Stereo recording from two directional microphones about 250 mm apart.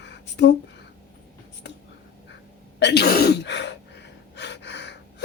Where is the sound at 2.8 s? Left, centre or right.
Left.